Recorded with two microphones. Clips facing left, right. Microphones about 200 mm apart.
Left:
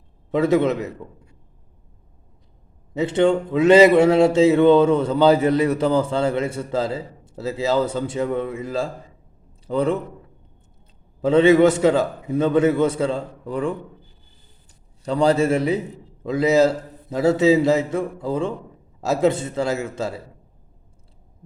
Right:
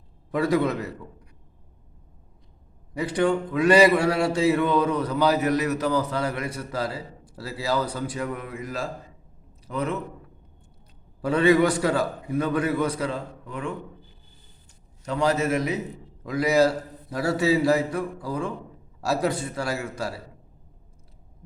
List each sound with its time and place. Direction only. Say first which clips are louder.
0.3 s speech: left 5 dB; 20° left (ahead or behind)
2.9 s a man's voice: left 5 dB; 25° left (ahead or behind)
11.2 s speech: left 6 dB; 20° left (ahead or behind)
15.0 s a man's voice: left 6 dB; 30° left (ahead or behind)